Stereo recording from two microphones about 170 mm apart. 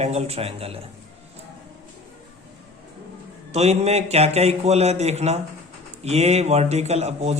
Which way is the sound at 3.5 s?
40° right (ahead or behind).